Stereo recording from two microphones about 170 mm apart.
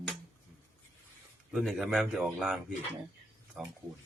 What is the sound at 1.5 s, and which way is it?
A man's voice, centre (ahead or behind).